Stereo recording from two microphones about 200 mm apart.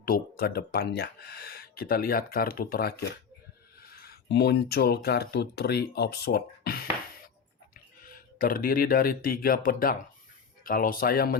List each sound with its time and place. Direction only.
0.0 s speech: 50° left (ahead or behind)